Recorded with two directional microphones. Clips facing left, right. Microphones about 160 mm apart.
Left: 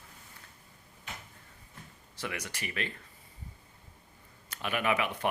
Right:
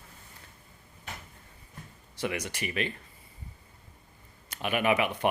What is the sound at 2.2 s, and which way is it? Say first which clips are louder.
Speech: right 6 dB; 20° right (ahead or behind).